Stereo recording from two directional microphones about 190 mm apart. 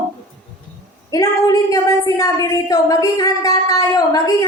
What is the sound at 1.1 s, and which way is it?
A woman's voice, 20° left (ahead or behind).